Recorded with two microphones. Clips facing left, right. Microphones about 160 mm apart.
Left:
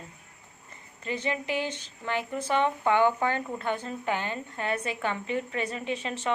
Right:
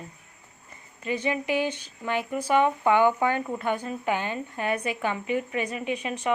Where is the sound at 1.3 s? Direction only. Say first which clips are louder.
Right 4 dB; 15° right (ahead or behind).